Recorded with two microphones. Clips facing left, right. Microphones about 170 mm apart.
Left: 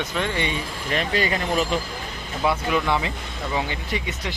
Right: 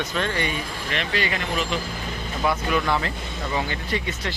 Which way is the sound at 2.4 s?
15° left (ahead or behind).